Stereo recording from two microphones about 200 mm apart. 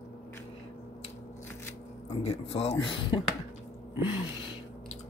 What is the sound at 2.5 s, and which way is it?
Speech, 30° left (ahead or behind).